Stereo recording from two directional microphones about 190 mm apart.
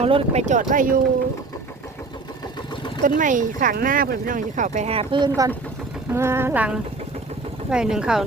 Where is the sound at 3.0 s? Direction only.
45° right (ahead or behind).